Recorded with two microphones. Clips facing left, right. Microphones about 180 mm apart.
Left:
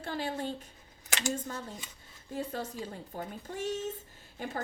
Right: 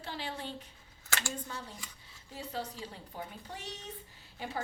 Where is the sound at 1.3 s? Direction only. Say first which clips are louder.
Left 5 dB; 45° left (ahead or behind).